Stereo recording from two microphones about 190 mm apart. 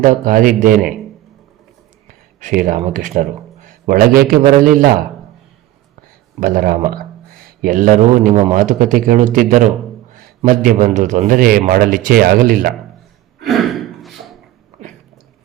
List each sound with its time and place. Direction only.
0.0 s speech: 45° right (ahead or behind)
2.4 s speech: 45° right (ahead or behind)
6.4 s speech: 45° right (ahead or behind)
13.4 s a sound: centre (ahead or behind)